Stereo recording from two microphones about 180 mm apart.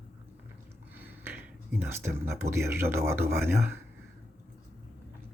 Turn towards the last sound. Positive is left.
turn(degrees=-15)  # may be behind; listen again after turning